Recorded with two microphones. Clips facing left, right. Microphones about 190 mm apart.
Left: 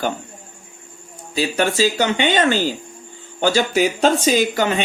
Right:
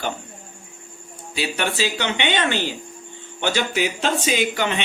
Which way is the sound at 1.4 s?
40° left (ahead or behind).